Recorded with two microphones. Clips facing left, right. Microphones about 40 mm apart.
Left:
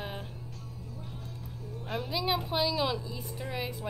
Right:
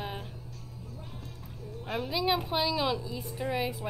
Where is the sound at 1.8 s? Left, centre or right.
Centre.